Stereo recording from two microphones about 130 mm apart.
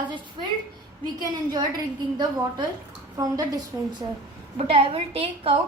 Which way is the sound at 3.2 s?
30° right (ahead or behind).